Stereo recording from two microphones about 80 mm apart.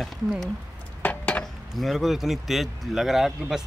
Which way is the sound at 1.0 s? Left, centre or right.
Centre.